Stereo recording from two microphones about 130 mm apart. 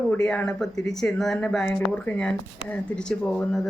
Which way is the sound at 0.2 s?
5° left (ahead or behind).